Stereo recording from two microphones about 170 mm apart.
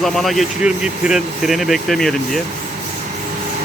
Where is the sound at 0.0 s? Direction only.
Centre (ahead or behind).